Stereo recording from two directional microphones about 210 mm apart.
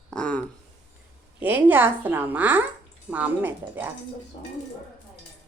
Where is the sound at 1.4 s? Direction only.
10° right (ahead or behind).